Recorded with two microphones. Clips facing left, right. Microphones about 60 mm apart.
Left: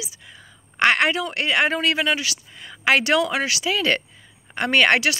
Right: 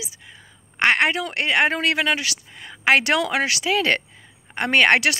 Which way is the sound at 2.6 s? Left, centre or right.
Right.